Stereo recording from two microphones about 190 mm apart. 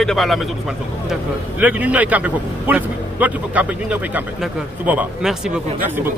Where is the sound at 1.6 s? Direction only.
10° right (ahead or behind).